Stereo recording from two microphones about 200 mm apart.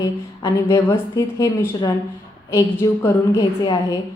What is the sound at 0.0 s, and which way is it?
A woman's voice, 15° left (ahead or behind).